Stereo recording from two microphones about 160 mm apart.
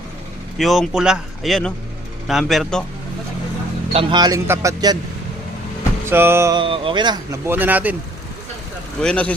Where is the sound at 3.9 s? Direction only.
30° right (ahead or behind).